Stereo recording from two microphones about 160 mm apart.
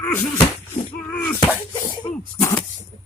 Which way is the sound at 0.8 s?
40° left (ahead or behind).